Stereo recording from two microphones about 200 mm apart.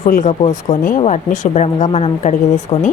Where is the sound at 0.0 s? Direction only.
40° left (ahead or behind).